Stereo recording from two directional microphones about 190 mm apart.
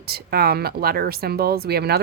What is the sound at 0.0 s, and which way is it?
Speech, 55° right (ahead or behind).